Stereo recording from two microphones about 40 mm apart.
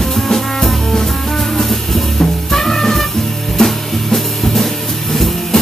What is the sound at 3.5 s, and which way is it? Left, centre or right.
Drum kit, centre.